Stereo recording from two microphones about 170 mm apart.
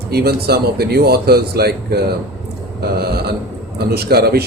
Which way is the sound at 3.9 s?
70° right (ahead or behind).